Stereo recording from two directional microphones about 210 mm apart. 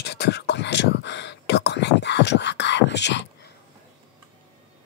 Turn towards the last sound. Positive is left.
turn(degrees=55)  # may be behind; listen again after turning